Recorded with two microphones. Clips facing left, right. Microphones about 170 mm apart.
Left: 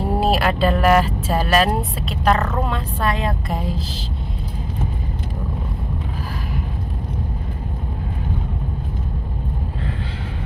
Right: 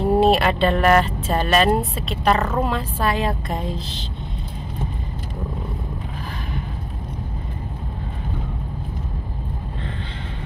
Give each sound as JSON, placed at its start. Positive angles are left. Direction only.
{"t": 0.0, "sound": "speech", "side_deg": 0}